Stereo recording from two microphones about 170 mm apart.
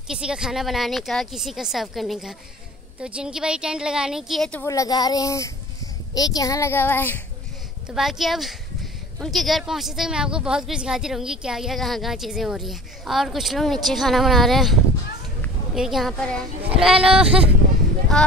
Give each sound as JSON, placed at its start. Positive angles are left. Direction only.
{"t": 0.1, "sound": "speech", "side_deg": -5}
{"t": 4.6, "sound": "speech", "side_deg": 20}
{"t": 7.9, "sound": "speech", "side_deg": 0}